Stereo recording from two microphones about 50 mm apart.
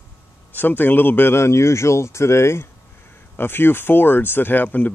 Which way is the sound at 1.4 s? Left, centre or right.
Left.